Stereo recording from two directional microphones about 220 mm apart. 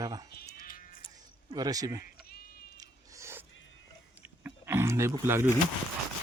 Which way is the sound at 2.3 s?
45° left (ahead or behind).